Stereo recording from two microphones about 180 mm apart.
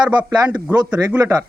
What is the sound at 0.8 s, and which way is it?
Speech, 20° right (ahead or behind).